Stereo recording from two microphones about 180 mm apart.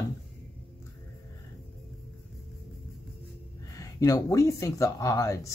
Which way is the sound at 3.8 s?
20° left (ahead or behind).